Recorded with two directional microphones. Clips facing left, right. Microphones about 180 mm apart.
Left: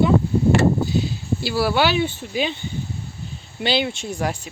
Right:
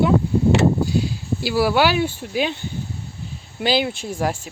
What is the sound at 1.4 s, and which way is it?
Speech, 10° right (ahead or behind).